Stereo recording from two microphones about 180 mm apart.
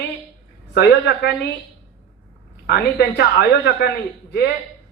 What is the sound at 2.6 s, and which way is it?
Speech, 65° left (ahead or behind).